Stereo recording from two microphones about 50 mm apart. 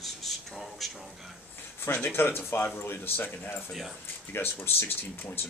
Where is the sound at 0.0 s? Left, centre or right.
Centre.